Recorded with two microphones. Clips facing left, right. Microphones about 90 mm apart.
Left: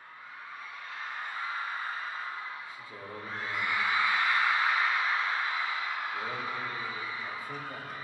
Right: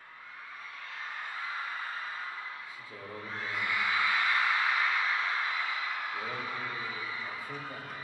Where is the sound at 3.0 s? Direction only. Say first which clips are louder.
Left 1 dB; 15° left (ahead or behind).